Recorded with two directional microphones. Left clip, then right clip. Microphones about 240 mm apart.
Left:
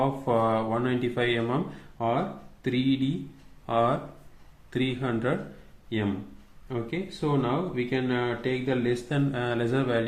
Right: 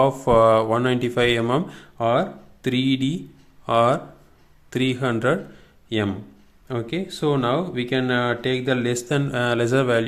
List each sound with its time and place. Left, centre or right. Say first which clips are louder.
0.0 s speech: right 9 dB; right
6.7 s speech: right 5 dB; right